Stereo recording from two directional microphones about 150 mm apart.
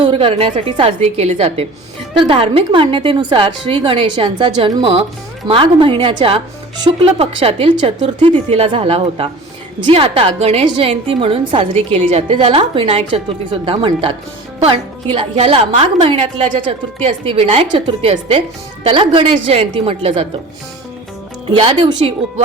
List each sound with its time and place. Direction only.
0.0 s a woman's voice: 35° right (ahead or behind)
21.5 s a woman's voice: 35° right (ahead or behind)